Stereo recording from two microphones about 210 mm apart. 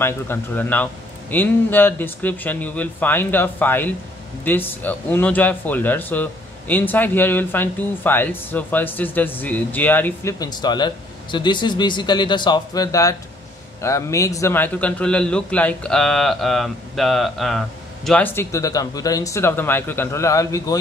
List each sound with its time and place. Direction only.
0.0 s a man's voice: 10° left (ahead or behind)